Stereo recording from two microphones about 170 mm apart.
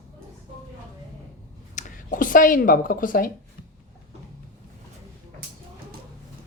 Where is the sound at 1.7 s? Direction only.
50° left (ahead or behind).